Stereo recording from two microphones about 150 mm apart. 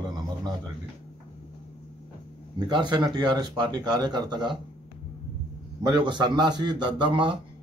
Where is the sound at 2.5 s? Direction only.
30° right (ahead or behind).